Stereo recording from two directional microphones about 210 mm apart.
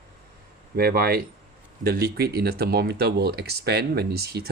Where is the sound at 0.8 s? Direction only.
45° right (ahead or behind).